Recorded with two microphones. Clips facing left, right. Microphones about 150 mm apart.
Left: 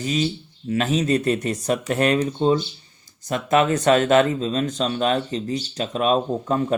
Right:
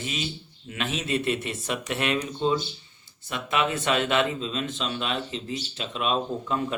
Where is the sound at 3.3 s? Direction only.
40° left (ahead or behind).